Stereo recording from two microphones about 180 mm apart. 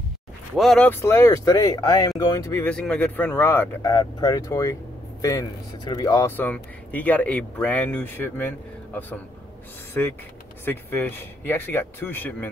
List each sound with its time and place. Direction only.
0.6 s speech: 5° left (ahead or behind)
3.8 s speech: 20° left (ahead or behind)